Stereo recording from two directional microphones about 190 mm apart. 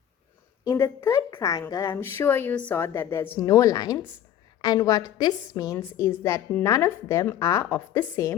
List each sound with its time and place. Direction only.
0.7 s a woman's voice: 15° left (ahead or behind)